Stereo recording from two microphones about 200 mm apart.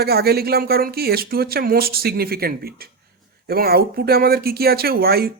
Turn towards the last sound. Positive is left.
turn(degrees=-50)  # may be behind; listen again after turning